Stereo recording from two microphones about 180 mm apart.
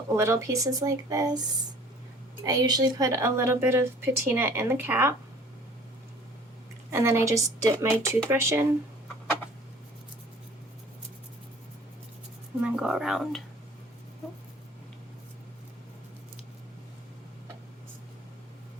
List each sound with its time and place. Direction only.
0.1 s speech: 15° right (ahead or behind)
2.4 s speech: 20° right (ahead or behind)
6.9 s speech: 15° right (ahead or behind)
12.6 s speech: 5° right (ahead or behind)